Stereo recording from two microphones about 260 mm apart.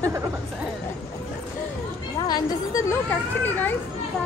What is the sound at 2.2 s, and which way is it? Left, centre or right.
A child's voice, centre.